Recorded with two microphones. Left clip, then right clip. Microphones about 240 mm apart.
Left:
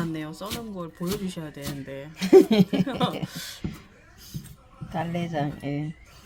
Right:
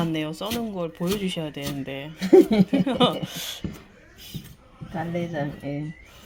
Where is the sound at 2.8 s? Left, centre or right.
Centre.